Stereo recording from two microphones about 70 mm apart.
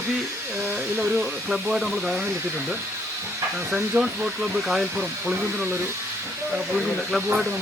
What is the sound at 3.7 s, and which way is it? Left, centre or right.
Speech, right.